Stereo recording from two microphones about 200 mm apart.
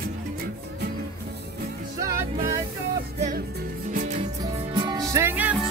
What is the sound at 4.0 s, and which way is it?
Music, 35° right (ahead or behind).